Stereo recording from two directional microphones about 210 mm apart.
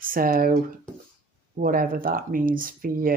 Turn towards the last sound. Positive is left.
turn(degrees=-40)  # may be behind; listen again after turning